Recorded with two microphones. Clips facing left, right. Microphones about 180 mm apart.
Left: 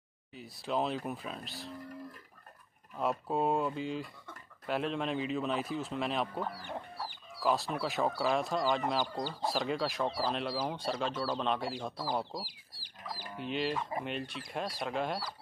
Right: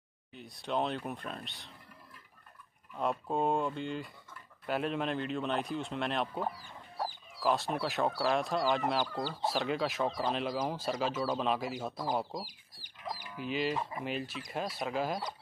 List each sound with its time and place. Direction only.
0.3 s speech: centre (ahead or behind)
3.0 s speech: 5° left (ahead or behind)
6.5 s chicken: 65° left (ahead or behind)
7.3 s speech: centre (ahead or behind)
12.4 s chicken: 30° left (ahead or behind)
13.4 s speech: centre (ahead or behind)